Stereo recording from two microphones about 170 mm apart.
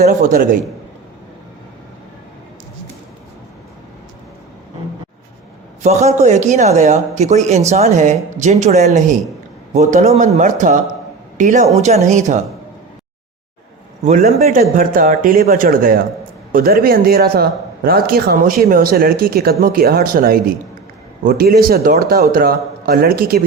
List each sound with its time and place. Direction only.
0.0 s speech: 55° right (ahead or behind)
5.8 s speech: 40° right (ahead or behind)
14.0 s a man's voice: 45° right (ahead or behind)
14.6 s speech: 55° right (ahead or behind)